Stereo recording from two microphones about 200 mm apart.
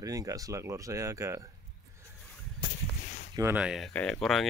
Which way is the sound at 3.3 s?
10° right (ahead or behind).